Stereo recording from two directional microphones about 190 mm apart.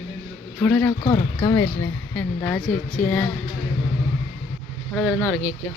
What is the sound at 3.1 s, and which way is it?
Speech, 10° left (ahead or behind).